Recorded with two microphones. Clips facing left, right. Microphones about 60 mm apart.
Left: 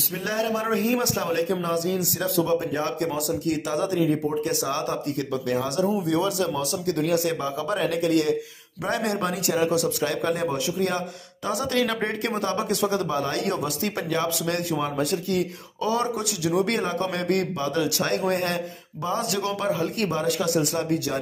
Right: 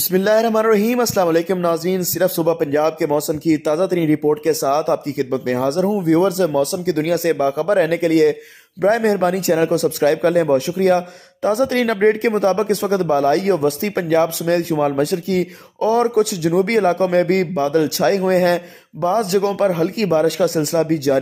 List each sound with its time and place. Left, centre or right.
0.1 s speech: right
19.0 s speech: right